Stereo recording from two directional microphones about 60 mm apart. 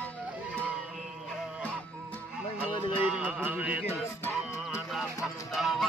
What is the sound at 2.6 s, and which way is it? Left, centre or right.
Music, centre.